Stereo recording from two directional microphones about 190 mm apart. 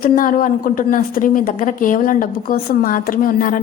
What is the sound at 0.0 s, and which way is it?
A woman's voice, 50° left (ahead or behind).